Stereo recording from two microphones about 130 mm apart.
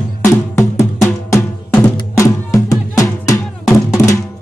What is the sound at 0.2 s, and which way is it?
Drum, 20° left (ahead or behind).